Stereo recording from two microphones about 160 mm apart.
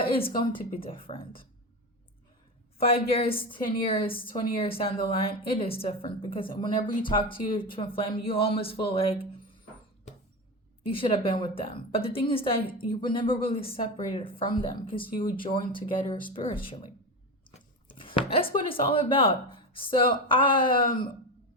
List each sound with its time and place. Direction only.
0.0 s a woman's voice: 35° left (ahead or behind)
2.7 s a woman's voice: 35° left (ahead or behind)
10.8 s a woman's voice: 35° left (ahead or behind)
17.9 s a woman's voice: 35° left (ahead or behind)